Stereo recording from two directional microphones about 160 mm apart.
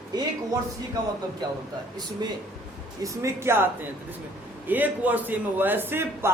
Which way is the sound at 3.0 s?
20° right (ahead or behind).